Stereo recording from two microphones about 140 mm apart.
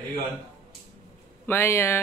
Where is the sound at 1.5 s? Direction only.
15° left (ahead or behind).